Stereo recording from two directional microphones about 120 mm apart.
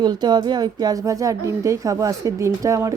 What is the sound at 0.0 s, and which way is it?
Speech, 35° right (ahead or behind).